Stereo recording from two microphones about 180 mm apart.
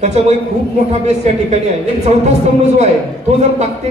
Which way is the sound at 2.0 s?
40° right (ahead or behind).